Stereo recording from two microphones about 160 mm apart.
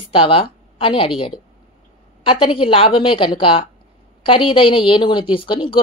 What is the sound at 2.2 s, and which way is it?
A woman's voice, 30° left (ahead or behind).